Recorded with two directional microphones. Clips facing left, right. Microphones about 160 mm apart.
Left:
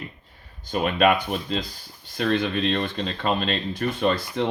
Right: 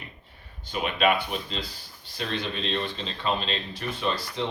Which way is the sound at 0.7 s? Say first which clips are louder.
Left 4 dB; 45° left (ahead or behind).